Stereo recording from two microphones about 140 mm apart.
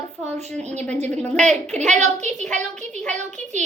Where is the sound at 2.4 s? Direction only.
5° left (ahead or behind).